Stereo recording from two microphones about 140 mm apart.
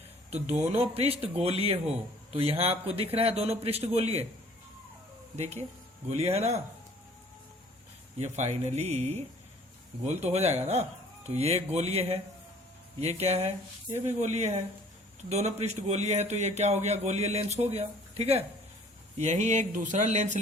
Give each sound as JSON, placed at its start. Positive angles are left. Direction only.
{"t": 0.3, "sound": "a man's voice", "side_deg": -50}
{"t": 5.4, "sound": "a man's voice", "side_deg": -50}
{"t": 8.2, "sound": "a man's voice", "side_deg": -50}